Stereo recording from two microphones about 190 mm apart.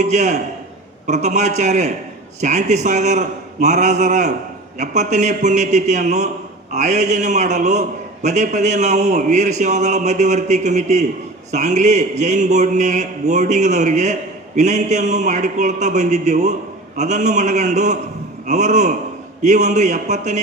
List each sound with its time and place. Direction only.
0.0 s a man's voice: 35° right (ahead or behind)